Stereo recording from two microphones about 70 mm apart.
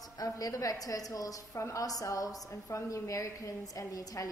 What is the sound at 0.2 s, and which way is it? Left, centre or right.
A woman's voice, left.